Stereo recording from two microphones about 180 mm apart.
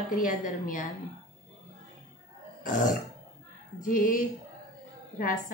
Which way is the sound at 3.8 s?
50° left (ahead or behind).